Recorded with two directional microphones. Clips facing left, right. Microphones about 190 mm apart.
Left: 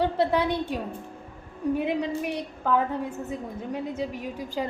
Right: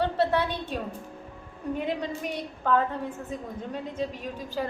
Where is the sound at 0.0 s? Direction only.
15° left (ahead or behind).